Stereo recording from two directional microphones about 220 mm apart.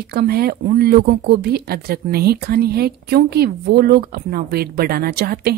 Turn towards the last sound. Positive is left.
turn(degrees=-45)  # may be behind; listen again after turning